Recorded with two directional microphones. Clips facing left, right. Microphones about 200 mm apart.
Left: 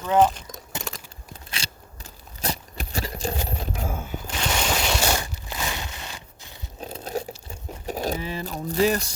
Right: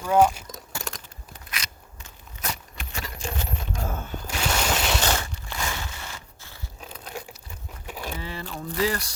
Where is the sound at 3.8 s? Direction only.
10° left (ahead or behind).